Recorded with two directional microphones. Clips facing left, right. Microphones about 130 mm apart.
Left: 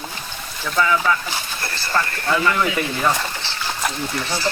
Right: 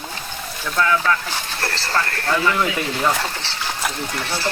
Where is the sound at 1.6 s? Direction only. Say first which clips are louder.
Right 3 dB; 80° right.